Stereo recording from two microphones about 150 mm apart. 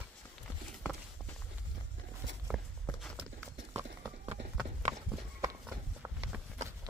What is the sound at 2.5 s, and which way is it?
Walk, 5° right (ahead or behind).